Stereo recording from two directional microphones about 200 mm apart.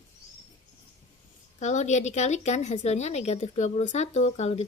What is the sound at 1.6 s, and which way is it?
A woman's voice, 35° left (ahead or behind).